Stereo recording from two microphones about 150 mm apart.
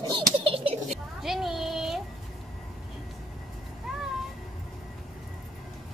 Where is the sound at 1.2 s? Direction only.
Centre (ahead or behind).